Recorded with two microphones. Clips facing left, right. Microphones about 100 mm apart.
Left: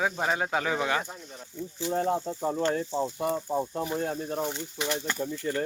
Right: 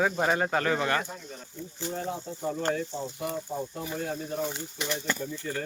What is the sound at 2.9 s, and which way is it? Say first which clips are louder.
Speech: left 5 dB; 45° left (ahead or behind).